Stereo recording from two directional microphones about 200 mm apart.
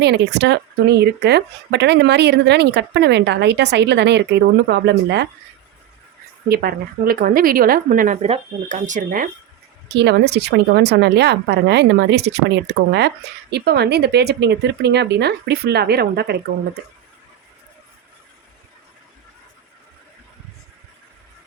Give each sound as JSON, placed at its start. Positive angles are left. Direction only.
{"t": 0.0, "sound": "speech", "side_deg": -60}
{"t": 6.5, "sound": "a woman's voice", "side_deg": -50}
{"t": 9.9, "sound": "speech", "side_deg": -60}